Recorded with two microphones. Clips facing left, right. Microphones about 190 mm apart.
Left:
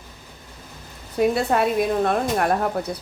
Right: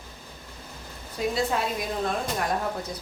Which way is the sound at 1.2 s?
60° left (ahead or behind).